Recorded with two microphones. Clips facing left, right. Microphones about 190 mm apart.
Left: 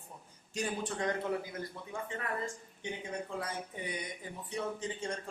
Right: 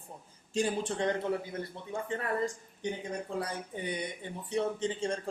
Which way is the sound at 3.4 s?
30° right (ahead or behind).